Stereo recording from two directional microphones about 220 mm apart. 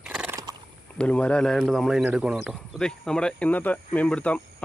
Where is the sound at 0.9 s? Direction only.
5° left (ahead or behind).